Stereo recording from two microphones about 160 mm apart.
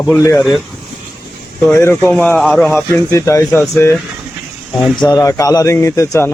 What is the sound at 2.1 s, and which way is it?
Speech, 5° left (ahead or behind).